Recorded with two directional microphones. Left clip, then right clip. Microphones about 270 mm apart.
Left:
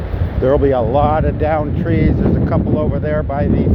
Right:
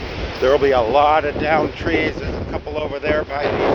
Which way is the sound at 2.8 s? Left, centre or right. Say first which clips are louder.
Left 1 dB; centre.